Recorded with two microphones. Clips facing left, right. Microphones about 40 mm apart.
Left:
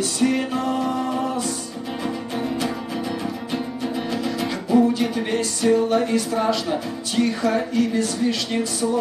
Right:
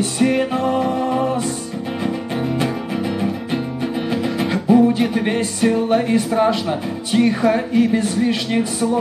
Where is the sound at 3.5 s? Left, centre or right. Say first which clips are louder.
Right 4 dB; right.